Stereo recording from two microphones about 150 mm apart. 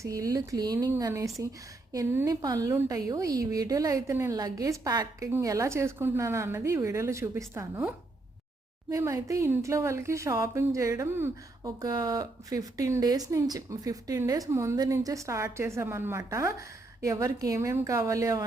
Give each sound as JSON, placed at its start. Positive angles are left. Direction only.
{"t": 0.0, "sound": "speech", "side_deg": -25}